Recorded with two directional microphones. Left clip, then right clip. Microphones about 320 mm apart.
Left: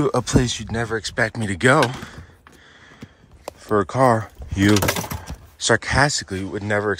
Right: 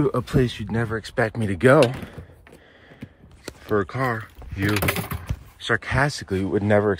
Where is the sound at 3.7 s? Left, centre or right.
Centre.